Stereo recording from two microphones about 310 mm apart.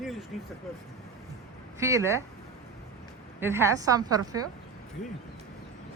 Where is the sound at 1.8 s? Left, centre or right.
Centre.